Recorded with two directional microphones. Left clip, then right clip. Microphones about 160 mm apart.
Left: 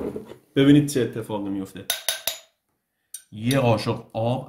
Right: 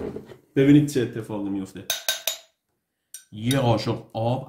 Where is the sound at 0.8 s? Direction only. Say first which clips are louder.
Left 1 dB; 35° left (ahead or behind).